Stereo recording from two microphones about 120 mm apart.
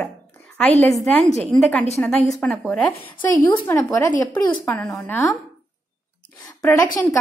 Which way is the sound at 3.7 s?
25° left (ahead or behind).